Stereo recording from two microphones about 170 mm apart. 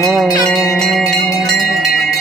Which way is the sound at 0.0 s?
Centre (ahead or behind).